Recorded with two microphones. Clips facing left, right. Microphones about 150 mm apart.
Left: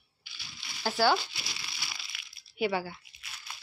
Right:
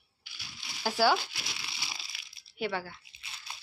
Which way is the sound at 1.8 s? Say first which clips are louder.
Right 1 dB; 30° right (ahead or behind).